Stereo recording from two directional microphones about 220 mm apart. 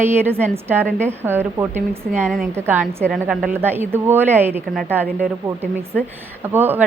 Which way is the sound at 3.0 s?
Centre (ahead or behind).